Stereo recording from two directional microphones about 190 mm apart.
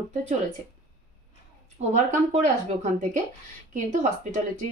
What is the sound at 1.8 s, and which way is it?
Speech, 35° right (ahead or behind).